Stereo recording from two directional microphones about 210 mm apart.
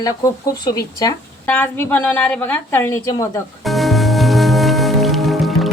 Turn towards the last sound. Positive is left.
turn(degrees=0)  # may be behind; listen again after turning